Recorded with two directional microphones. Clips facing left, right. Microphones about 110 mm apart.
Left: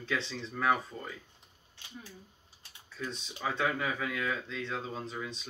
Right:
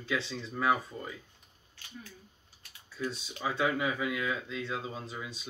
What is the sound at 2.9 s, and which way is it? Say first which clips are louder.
Speech: right 3 dB; 5° right (ahead or behind).